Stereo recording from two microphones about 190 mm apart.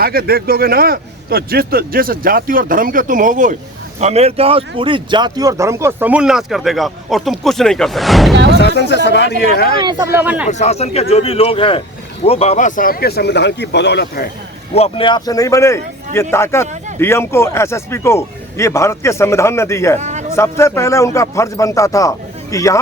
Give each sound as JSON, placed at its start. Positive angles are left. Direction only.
{"t": 0.0, "sound": "a man's voice", "side_deg": -55}
{"t": 8.5, "sound": "speech", "side_deg": 60}
{"t": 9.8, "sound": "speech", "side_deg": -10}
{"t": 10.5, "sound": "a man's voice", "side_deg": 35}
{"t": 14.8, "sound": "speech", "side_deg": 25}
{"t": 20.0, "sound": "a sound", "side_deg": -40}
{"t": 20.3, "sound": "speech", "side_deg": 15}